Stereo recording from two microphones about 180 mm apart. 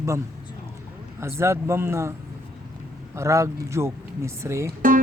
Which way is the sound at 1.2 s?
15° right (ahead or behind).